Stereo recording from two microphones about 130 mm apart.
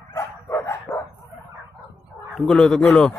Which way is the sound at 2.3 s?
5° left (ahead or behind).